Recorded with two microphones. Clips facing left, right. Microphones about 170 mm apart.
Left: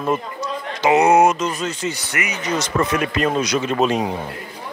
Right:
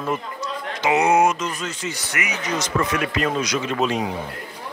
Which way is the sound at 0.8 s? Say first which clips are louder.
Left 4 dB; 45° left (ahead or behind).